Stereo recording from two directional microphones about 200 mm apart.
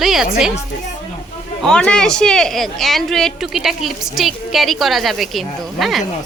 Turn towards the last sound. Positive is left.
turn(degrees=0)  # may be behind; listen again after turning